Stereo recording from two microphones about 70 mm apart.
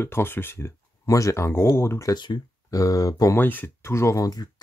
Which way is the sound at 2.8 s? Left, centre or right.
Left.